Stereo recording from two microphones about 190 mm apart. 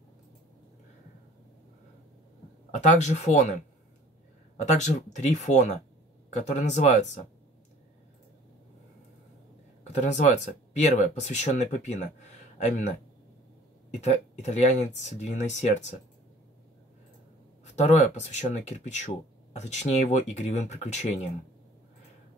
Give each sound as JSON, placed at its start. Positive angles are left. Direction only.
{"t": 2.7, "sound": "speech", "side_deg": 40}
{"t": 9.9, "sound": "speech", "side_deg": 40}
{"t": 14.0, "sound": "speech", "side_deg": 35}
{"t": 17.7, "sound": "speech", "side_deg": 35}